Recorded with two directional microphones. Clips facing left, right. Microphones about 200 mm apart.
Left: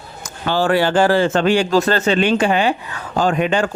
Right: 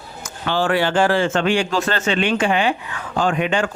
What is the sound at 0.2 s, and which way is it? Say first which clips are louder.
Speech: left 2 dB; 40° left (ahead or behind).